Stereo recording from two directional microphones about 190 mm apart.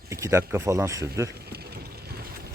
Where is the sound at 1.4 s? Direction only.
55° right (ahead or behind).